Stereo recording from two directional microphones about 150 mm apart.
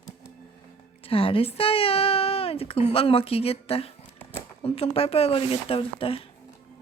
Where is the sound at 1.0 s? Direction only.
35° left (ahead or behind).